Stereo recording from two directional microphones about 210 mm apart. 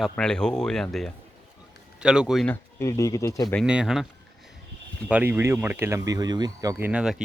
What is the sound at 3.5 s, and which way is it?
Speech, 5° right (ahead or behind).